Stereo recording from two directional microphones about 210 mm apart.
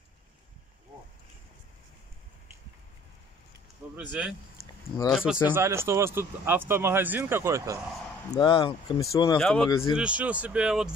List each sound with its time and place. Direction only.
3.9 s speech: 5° right (ahead or behind)
8.3 s speech: 25° left (ahead or behind)
9.4 s speech: centre (ahead or behind)
9.7 s speech: 20° left (ahead or behind)
9.9 s speech: 5° right (ahead or behind)